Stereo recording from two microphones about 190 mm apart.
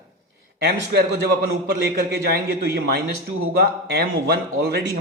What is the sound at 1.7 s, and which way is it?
A man's voice, 55° right (ahead or behind).